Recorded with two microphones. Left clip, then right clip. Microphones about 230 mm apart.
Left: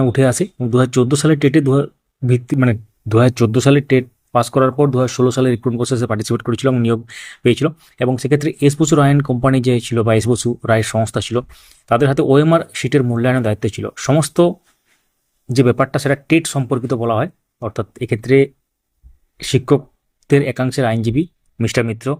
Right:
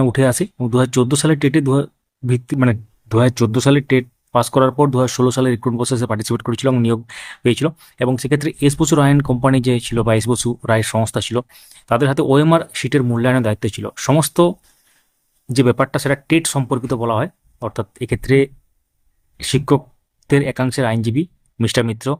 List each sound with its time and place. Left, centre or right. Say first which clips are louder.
0.0 s speech: left 1 dB; centre